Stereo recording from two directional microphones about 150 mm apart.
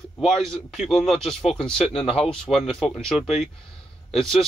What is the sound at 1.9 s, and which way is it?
Speech, 40° left (ahead or behind).